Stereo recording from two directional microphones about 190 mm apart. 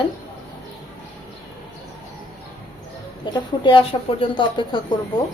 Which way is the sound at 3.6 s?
25° left (ahead or behind).